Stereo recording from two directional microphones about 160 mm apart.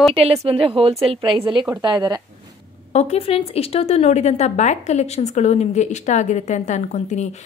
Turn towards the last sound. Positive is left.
turn(degrees=45)  # may be behind; listen again after turning